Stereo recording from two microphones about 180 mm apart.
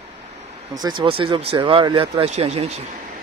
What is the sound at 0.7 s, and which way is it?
Speech, 25° right (ahead or behind).